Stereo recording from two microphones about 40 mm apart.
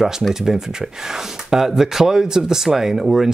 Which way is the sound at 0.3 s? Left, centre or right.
Centre.